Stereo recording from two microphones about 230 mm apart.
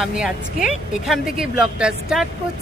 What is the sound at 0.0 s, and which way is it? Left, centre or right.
Speech, centre.